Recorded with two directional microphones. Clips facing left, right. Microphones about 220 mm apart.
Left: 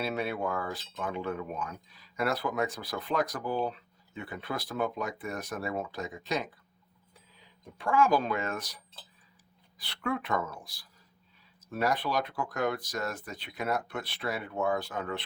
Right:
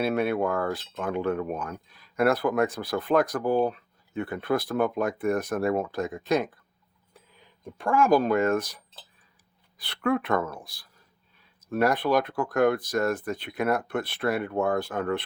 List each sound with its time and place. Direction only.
0.0 s speech: 55° right (ahead or behind)
7.8 s speech: 45° right (ahead or behind)